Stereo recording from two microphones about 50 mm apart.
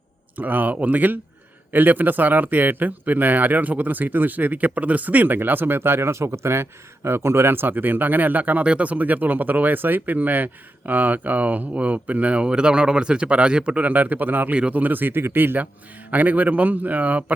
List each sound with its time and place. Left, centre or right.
0.3 s speech: right
13.8 s speech: right
16.0 s speech: right